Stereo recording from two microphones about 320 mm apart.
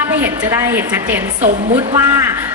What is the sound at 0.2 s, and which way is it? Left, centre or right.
A woman's voice, centre.